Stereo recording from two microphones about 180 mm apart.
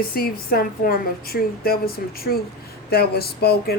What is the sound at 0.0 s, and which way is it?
A woman's voice, 55° left (ahead or behind).